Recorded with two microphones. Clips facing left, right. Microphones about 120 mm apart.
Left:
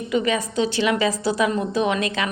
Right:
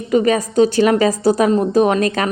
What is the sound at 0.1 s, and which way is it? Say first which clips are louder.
A woman's voice: right 7 dB; 45° right (ahead or behind).